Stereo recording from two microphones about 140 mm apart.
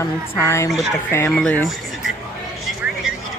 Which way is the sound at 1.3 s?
5° left (ahead or behind).